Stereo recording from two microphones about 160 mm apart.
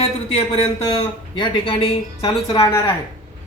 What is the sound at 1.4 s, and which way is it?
Speech, 30° left (ahead or behind).